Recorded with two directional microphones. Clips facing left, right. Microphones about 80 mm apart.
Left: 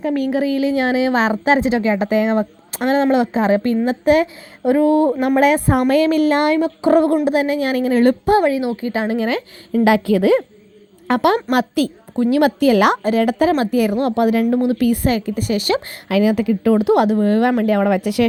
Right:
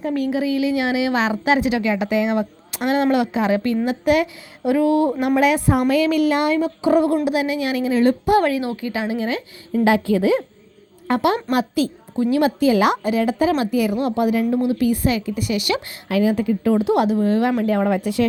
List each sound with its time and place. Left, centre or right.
0.1 s a woman's voice: left
8.4 s a woman's voice: left
9.0 s a woman's voice: left
11.1 s a woman's voice: left
13.0 s a woman's voice: left
16.0 s a woman's voice: left
17.6 s a woman's voice: left